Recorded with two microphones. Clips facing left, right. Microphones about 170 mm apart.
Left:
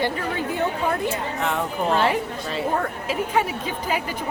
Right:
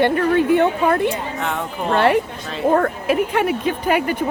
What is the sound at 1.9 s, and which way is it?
A woman's voice, 60° right (ahead or behind).